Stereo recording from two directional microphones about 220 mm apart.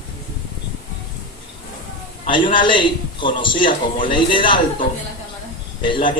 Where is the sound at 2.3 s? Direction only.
20° left (ahead or behind).